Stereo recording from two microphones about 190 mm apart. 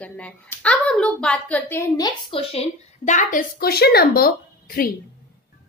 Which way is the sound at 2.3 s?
30° left (ahead or behind).